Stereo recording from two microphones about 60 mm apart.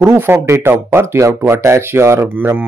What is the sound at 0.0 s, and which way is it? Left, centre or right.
Speech, right.